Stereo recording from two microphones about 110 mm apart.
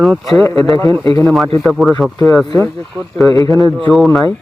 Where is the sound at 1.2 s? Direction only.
Centre (ahead or behind).